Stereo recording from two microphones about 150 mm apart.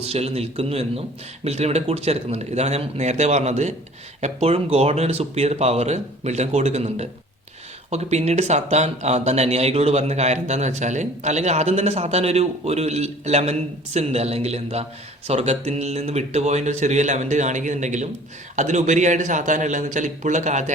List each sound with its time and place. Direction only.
0.0 s speech: 45° right (ahead or behind)